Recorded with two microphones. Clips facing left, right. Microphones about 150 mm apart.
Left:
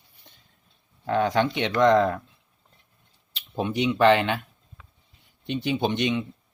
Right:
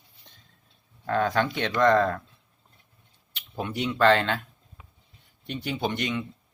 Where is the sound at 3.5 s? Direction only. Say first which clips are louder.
Left 4 dB; 20° left (ahead or behind).